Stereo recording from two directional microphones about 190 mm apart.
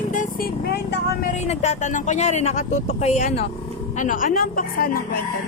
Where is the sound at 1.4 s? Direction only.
35° left (ahead or behind).